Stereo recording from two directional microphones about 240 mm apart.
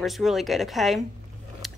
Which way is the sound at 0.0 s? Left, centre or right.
Centre.